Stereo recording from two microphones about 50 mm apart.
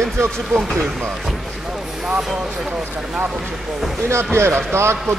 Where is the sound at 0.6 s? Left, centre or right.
Centre.